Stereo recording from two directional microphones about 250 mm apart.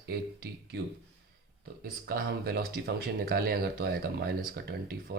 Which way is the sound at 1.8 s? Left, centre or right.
Right.